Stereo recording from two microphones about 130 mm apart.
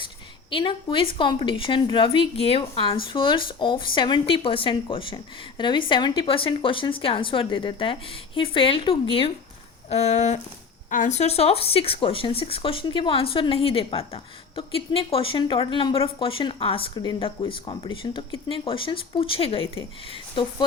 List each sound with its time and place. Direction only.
0.5 s a woman's voice: 40° left (ahead or behind)
9.9 s speech: 60° left (ahead or behind)
10.8 s speech: 80° left; by 20.7 s 40° left (ahead or behind)